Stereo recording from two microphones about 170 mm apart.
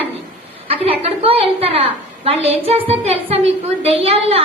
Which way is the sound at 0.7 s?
35° right (ahead or behind).